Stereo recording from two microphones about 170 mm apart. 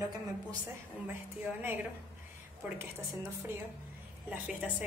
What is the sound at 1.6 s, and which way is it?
Speech, 10° right (ahead or behind).